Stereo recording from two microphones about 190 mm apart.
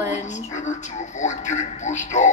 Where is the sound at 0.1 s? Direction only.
40° left (ahead or behind).